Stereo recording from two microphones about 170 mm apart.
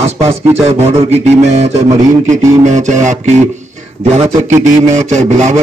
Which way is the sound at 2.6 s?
45° right (ahead or behind).